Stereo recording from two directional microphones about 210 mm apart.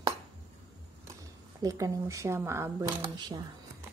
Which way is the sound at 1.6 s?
15° right (ahead or behind).